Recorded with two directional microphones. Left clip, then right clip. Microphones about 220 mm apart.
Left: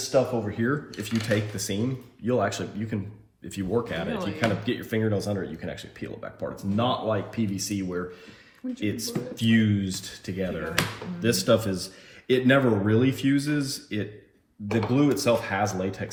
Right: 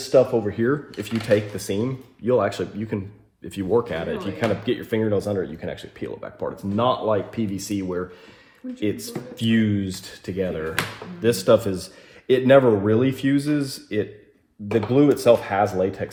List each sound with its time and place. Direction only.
0.1 s speech: 35° right (ahead or behind)